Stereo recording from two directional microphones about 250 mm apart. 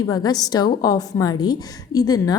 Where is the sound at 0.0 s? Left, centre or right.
Centre.